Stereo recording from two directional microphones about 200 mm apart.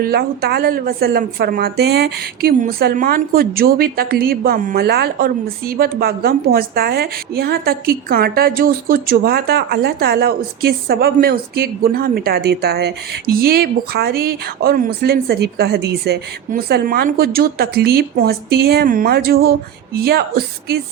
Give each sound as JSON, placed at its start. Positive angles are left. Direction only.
{"t": 0.0, "sound": "a woman's voice", "side_deg": -50}